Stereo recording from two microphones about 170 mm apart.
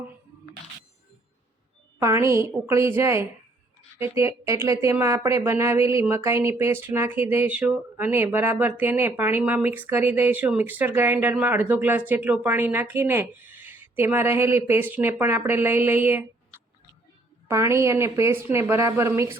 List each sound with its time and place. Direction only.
2.0 s a woman's voice: 15° right (ahead or behind)
17.5 s a woman's voice: 15° right (ahead or behind)